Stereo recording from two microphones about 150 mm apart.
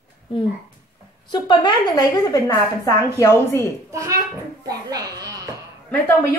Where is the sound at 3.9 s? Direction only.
20° right (ahead or behind).